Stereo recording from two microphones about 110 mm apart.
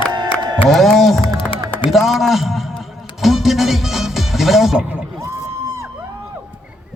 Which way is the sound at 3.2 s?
Centre (ahead or behind).